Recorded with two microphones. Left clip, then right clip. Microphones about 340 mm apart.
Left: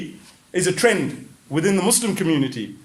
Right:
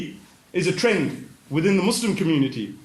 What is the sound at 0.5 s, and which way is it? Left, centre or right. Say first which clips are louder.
A man's voice: left 3 dB; left.